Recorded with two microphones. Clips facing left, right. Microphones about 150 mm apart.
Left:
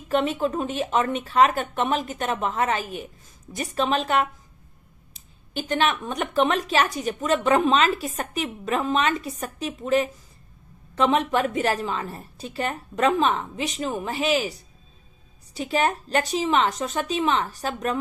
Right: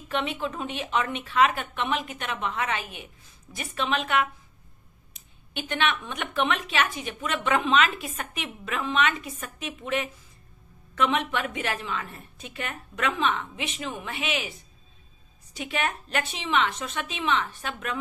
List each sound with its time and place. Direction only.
0.1 s speech: 40° left (ahead or behind)